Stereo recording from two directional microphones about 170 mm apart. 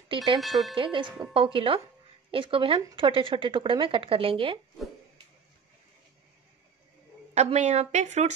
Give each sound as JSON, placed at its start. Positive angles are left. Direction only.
{"t": 0.4, "sound": "speech", "side_deg": 0}
{"t": 0.7, "sound": "speech", "side_deg": -30}
{"t": 7.3, "sound": "speech", "side_deg": -40}